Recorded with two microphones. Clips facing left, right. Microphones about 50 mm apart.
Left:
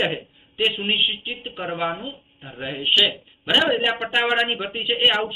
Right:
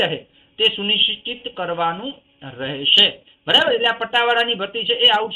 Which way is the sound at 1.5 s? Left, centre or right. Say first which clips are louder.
Right 5 dB; centre.